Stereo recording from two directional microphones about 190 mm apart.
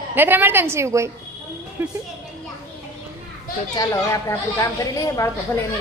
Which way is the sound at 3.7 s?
15° left (ahead or behind).